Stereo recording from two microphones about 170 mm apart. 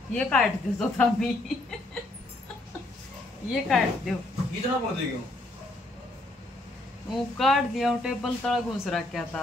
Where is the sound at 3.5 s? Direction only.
Centre (ahead or behind).